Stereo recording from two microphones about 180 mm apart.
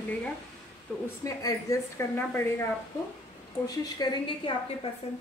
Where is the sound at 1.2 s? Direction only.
20° left (ahead or behind).